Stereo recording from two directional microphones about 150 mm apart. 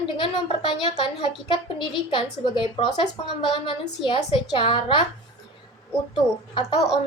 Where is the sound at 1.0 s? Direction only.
35° left (ahead or behind).